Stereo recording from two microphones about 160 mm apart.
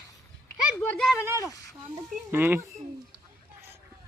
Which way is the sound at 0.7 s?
10° left (ahead or behind).